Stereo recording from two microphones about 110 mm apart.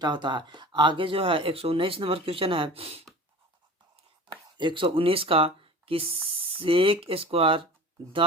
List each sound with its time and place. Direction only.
0.0 s speech: 45° right (ahead or behind); by 3.0 s 60° right (ahead or behind)
4.3 s speech: 45° right (ahead or behind)